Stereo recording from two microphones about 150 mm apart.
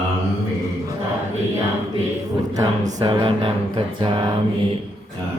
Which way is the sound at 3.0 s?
30° right (ahead or behind).